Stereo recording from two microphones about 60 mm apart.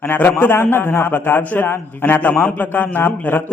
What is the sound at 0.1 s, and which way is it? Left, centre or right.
A man's voice, left.